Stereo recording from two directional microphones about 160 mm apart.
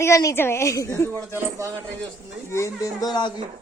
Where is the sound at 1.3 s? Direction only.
20° right (ahead or behind).